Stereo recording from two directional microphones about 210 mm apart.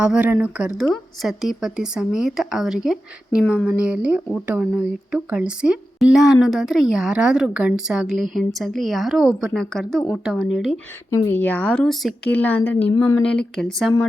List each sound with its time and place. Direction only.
0.0 s a woman's voice: 5° right (ahead or behind)
11.1 s speech: 10° left (ahead or behind)
13.0 s speech: 20° left (ahead or behind)
13.6 s a woman's voice: centre (ahead or behind)